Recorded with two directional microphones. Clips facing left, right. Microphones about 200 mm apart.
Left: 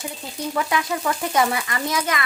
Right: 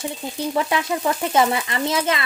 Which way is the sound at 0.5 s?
25° right (ahead or behind).